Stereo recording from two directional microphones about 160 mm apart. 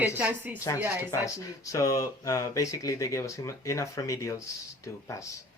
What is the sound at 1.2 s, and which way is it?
Speech, 20° left (ahead or behind).